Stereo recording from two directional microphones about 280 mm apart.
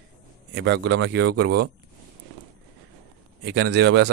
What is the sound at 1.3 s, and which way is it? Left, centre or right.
Speech, right.